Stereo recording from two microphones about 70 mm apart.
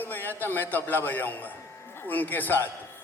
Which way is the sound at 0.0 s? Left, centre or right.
Left.